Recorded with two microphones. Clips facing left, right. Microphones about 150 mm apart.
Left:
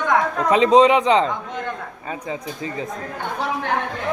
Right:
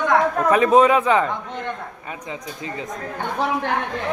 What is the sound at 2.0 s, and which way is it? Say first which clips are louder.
Speech: left 5 dB; 30° left (ahead or behind).